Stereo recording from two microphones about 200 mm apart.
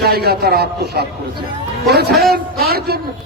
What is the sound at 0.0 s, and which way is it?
A man's voice, 50° right (ahead or behind).